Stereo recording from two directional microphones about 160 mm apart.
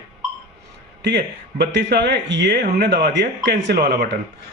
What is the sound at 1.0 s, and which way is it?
Speech, 90° right.